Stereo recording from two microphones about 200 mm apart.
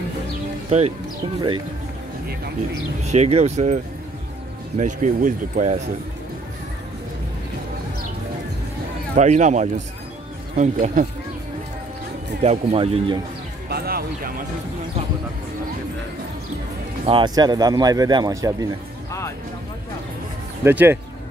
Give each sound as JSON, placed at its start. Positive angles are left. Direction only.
{"t": 0.7, "sound": "speech", "side_deg": -35}
{"t": 3.0, "sound": "speech", "side_deg": -35}
{"t": 9.1, "sound": "speech", "side_deg": -35}
{"t": 12.4, "sound": "speech", "side_deg": -30}
{"t": 13.7, "sound": "speech", "side_deg": -50}
{"t": 17.0, "sound": "speech", "side_deg": -25}
{"t": 20.6, "sound": "speech", "side_deg": -10}